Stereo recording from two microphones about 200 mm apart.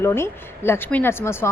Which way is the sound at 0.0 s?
10° left (ahead or behind).